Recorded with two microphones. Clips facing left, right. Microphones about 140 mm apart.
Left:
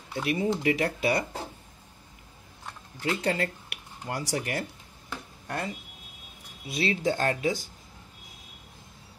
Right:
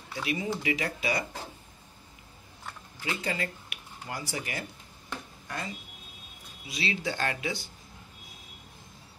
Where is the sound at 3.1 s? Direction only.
60° left (ahead or behind).